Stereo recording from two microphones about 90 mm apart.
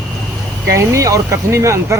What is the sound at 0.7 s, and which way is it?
Speech, 35° right (ahead or behind).